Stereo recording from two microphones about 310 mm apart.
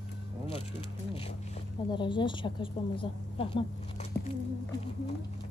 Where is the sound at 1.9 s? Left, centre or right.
Centre.